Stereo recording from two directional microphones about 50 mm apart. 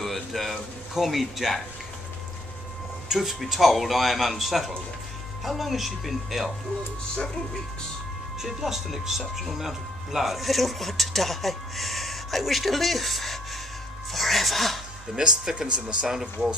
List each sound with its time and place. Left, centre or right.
0.0 s a sound: centre
3.1 s speech: centre
8.4 s speech: centre
15.1 s speech: centre